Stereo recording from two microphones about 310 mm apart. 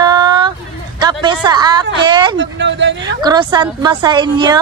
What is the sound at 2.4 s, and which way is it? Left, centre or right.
Speech, right.